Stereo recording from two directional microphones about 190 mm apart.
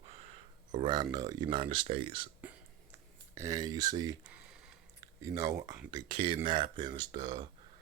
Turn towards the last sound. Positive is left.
turn(degrees=-25)  # may be behind; listen again after turning